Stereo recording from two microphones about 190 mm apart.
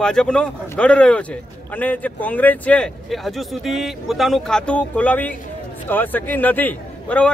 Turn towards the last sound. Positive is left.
turn(degrees=10)  # may be behind; listen again after turning